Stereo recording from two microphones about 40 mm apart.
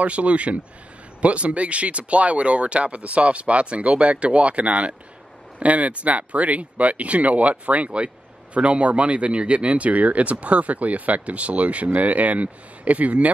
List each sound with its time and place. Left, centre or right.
0.0 s speech: right